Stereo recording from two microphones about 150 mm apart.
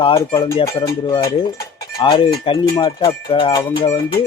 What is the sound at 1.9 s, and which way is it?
Speech, 35° left (ahead or behind).